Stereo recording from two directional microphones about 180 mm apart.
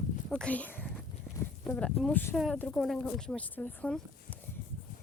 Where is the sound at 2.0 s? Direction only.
10° left (ahead or behind).